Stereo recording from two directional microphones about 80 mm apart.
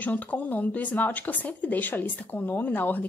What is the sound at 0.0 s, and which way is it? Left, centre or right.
A woman's voice, left.